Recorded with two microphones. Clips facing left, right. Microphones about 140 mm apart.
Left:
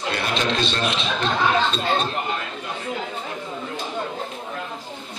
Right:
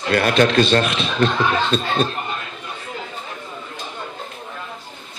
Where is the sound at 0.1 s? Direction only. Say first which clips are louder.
Right 9 dB; 60° right (ahead or behind).